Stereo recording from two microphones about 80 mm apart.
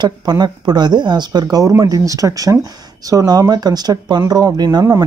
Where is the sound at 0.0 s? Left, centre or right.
Right.